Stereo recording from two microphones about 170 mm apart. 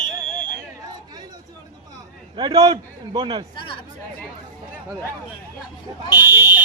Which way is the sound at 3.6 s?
30° left (ahead or behind).